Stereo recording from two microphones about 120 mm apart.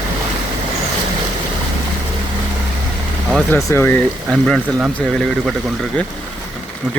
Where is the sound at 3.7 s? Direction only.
20° left (ahead or behind).